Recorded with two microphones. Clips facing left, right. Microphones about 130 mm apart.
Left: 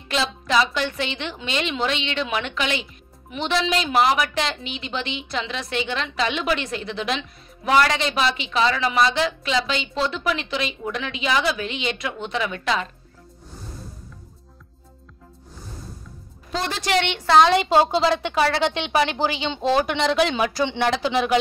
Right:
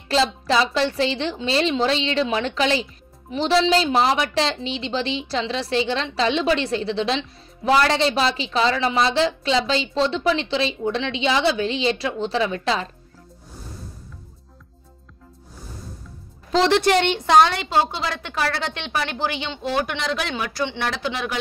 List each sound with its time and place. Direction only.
0.1 s a woman's voice: 30° right (ahead or behind)
16.5 s a woman's voice: 90° right
16.8 s a woman's voice: 45° right (ahead or behind)
17.6 s a woman's voice: 20° left (ahead or behind)